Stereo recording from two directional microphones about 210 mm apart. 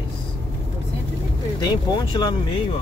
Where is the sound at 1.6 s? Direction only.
20° left (ahead or behind).